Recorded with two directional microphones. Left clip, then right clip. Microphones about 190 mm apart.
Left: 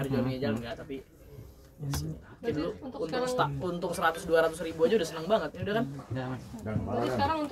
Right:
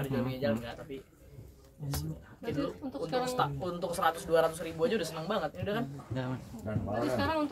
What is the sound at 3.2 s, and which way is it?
Speech, centre (ahead or behind).